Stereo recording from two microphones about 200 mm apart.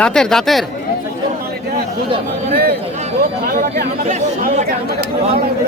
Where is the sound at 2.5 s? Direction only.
45° right (ahead or behind).